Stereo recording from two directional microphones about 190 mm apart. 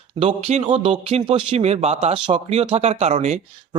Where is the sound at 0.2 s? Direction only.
30° right (ahead or behind).